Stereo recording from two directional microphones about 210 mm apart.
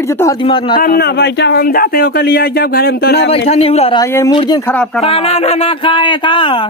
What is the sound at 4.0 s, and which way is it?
A woman's voice, 15° left (ahead or behind).